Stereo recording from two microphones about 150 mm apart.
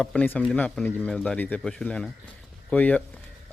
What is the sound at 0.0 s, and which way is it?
A man's voice, 5° left (ahead or behind).